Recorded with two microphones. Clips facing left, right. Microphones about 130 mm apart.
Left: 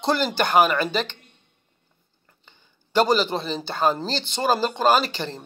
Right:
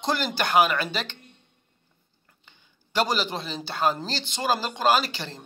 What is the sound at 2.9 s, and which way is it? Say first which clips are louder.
A man's voice: left 6 dB; 50° left (ahead or behind).